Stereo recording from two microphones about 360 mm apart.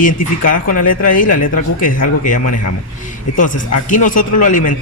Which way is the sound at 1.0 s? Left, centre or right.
Left.